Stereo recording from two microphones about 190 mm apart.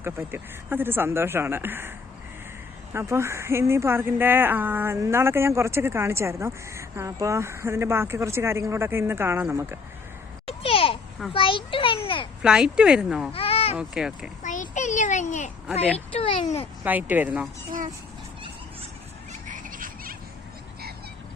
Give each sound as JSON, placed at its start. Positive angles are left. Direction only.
{"t": 0.0, "sound": "a woman's voice", "side_deg": -10}
{"t": 2.9, "sound": "a woman's voice", "side_deg": -15}
{"t": 10.4, "sound": "a sound", "side_deg": 30}
{"t": 12.4, "sound": "speech", "side_deg": -5}
{"t": 13.3, "sound": "sheep", "side_deg": 30}
{"t": 13.7, "sound": "speech", "side_deg": -5}
{"t": 14.4, "sound": "a sound", "side_deg": 40}
{"t": 16.1, "sound": "speech", "side_deg": 30}
{"t": 16.8, "sound": "a woman's voice", "side_deg": -10}
{"t": 19.5, "sound": "a sound", "side_deg": -45}